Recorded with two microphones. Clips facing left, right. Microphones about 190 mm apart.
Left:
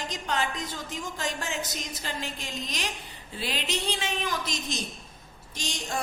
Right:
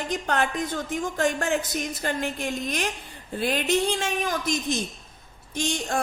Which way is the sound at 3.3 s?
50° right (ahead or behind).